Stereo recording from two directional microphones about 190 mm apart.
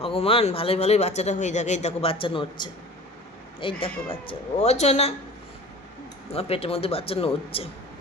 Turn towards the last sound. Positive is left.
turn(degrees=30)  # may be behind; listen again after turning